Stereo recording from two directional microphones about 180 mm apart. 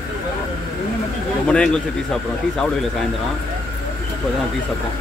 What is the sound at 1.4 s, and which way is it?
Speech, 5° left (ahead or behind).